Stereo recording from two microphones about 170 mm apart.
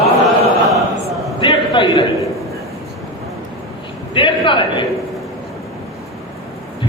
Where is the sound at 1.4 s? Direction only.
30° left (ahead or behind).